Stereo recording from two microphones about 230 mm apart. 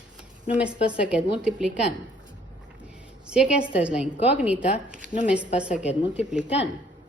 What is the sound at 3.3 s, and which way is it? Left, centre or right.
A woman's voice, centre.